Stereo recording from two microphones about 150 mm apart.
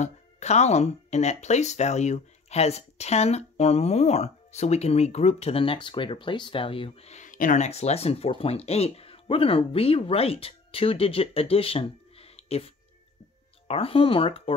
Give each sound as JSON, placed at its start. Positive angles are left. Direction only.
{"t": 0.0, "sound": "speech", "side_deg": 50}